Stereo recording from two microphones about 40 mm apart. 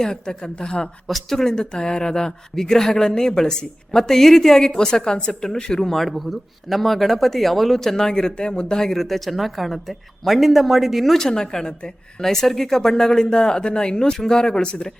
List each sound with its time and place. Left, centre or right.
0.0 s speech: centre
1.0 s speech: centre; by 5.8 s left
5.8 s speech: centre
11.2 s speech: centre